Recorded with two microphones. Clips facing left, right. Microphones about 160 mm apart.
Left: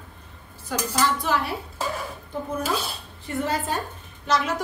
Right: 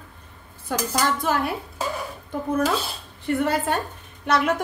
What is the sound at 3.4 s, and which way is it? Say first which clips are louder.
A woman's voice: right 1 dB; 60° right (ahead or behind).